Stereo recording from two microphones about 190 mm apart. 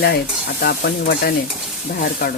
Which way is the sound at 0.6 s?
55° left (ahead or behind).